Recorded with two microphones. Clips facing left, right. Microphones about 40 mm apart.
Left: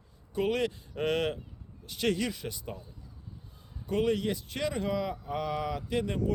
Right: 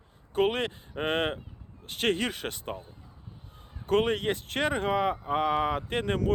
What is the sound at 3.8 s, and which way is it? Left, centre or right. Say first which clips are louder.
Speech: right 3 dB; right.